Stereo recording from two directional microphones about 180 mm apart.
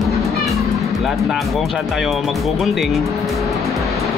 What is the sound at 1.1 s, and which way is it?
Speech, centre (ahead or behind).